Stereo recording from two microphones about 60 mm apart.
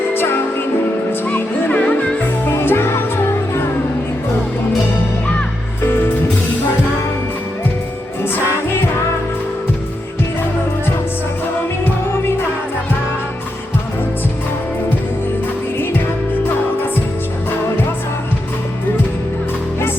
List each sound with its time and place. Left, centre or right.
0.1 s music: left
1.7 s music: left
8.2 s music: left